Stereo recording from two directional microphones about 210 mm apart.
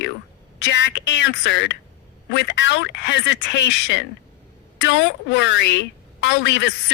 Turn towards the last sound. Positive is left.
turn(degrees=55)  # may be behind; listen again after turning